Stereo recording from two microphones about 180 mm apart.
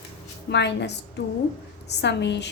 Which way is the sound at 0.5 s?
70° left (ahead or behind).